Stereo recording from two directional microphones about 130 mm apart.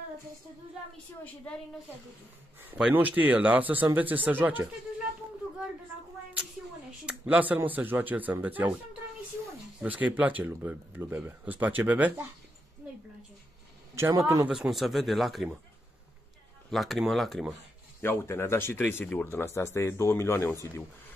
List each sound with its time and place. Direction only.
2.7 s speech: 10° right (ahead or behind)
7.1 s speech: 10° right (ahead or behind)
9.8 s speech: 10° right (ahead or behind)
13.9 s a man's voice: 20° right (ahead or behind)
14.5 s speech: centre (ahead or behind)
16.7 s speech: centre (ahead or behind)
18.0 s speech: 20° left (ahead or behind)